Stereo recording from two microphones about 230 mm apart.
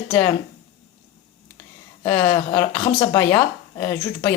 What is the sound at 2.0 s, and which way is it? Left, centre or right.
Speech, centre.